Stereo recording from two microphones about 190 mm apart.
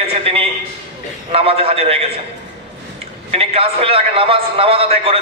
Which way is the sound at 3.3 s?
30° right (ahead or behind).